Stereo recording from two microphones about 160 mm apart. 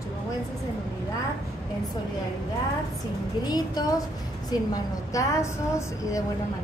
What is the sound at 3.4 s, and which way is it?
A woman's voice, 25° left (ahead or behind).